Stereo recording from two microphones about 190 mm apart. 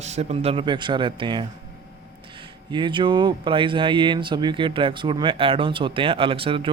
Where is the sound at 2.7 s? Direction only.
25° right (ahead or behind).